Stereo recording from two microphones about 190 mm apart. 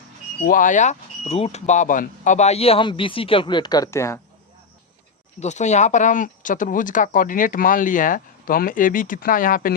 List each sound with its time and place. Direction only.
0.4 s speech: 45° left (ahead or behind); by 4.2 s 15° left (ahead or behind)
5.4 s speech: 40° left (ahead or behind)